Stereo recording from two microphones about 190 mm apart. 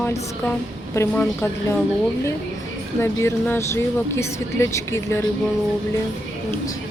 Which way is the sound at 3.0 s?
15° left (ahead or behind).